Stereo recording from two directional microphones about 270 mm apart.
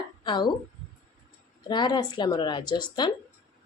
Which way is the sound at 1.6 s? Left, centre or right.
Centre.